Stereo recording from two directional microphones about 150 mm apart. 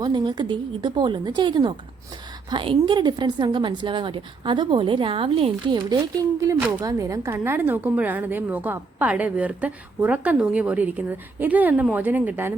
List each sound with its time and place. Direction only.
0.0 s a woman's voice: 30° right (ahead or behind); by 12.5 s 10° right (ahead or behind)